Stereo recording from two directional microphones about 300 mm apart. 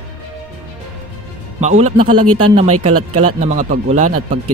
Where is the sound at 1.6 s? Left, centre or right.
Right.